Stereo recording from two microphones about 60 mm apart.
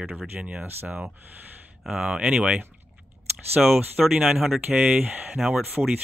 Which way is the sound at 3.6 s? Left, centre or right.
Centre.